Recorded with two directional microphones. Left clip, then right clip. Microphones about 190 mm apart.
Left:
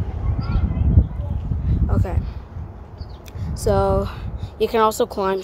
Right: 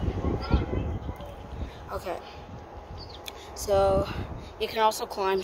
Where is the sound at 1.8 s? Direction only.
Centre (ahead or behind).